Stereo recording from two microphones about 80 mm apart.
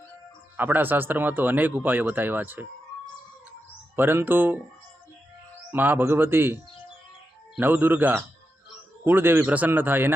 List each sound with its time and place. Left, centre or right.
0.5 s speech: right
3.9 s speech: right
5.7 s speech: right